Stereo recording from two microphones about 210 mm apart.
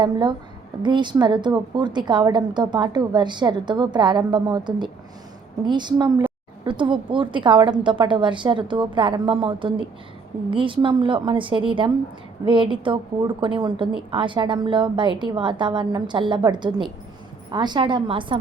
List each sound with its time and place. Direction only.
0.0 s a woman's voice: 20° right (ahead or behind)